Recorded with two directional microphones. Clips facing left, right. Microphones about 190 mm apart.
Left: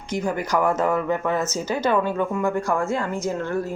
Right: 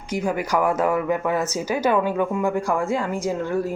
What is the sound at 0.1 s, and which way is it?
Speech, 10° right (ahead or behind).